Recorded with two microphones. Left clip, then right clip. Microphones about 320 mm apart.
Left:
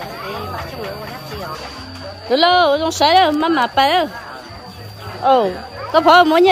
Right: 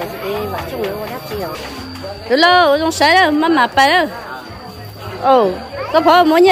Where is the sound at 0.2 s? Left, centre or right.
Right.